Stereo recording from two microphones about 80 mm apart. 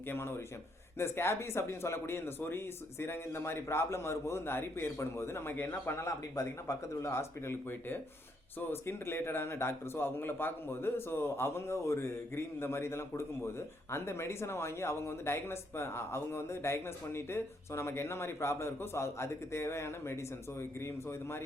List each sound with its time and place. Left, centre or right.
0.1 s a man's voice: left